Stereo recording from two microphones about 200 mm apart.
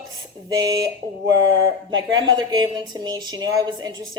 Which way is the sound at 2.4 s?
20° right (ahead or behind).